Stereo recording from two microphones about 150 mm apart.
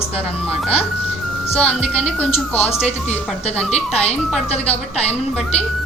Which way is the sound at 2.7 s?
45° left (ahead or behind).